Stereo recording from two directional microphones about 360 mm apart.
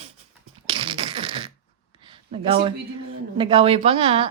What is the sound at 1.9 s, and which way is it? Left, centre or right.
A man's voice, centre.